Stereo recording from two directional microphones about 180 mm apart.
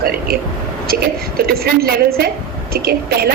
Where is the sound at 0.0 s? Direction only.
55° right (ahead or behind).